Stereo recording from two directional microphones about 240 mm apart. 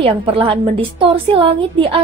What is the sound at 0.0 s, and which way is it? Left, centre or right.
Speech, right.